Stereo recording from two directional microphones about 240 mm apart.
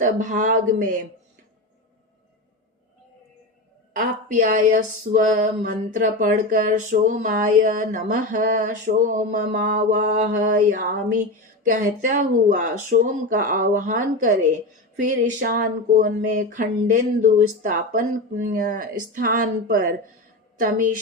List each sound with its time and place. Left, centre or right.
0.0 s speech: right
3.9 s speech: right